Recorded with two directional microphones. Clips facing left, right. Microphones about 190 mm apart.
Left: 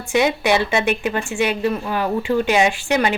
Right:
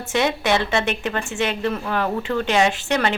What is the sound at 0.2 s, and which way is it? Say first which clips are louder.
A woman's voice: left 3 dB; 10° left (ahead or behind).